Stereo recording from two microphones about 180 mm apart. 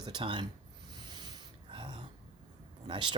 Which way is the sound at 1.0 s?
25° right (ahead or behind).